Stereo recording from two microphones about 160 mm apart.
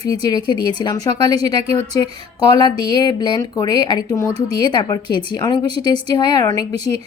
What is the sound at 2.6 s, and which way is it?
A woman's voice, 25° left (ahead or behind).